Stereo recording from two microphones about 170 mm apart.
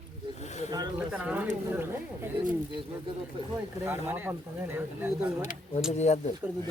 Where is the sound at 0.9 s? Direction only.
10° right (ahead or behind).